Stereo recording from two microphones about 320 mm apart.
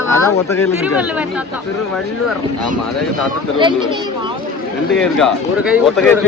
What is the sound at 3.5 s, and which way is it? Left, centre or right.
Speech, centre.